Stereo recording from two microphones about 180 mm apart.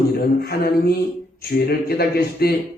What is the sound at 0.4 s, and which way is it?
A man's voice, 60° left (ahead or behind).